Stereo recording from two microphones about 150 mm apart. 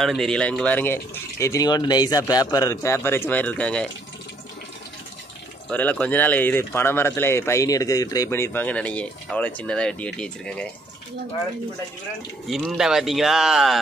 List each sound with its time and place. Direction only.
0.0 s a man's voice: centre (ahead or behind)
1.4 s a man's voice: 25° left (ahead or behind); by 3.9 s 5° left (ahead or behind)
5.7 s speech: 10° left (ahead or behind)
12.4 s a man's voice: centre (ahead or behind)